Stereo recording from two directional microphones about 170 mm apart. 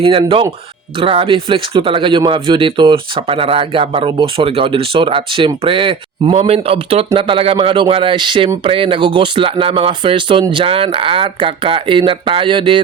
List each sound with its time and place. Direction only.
0.0 s speech: 30° right (ahead or behind)